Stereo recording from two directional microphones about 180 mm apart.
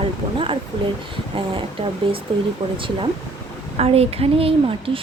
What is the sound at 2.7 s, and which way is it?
Speech, 30° right (ahead or behind).